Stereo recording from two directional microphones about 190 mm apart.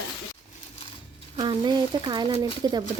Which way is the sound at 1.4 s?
20° right (ahead or behind).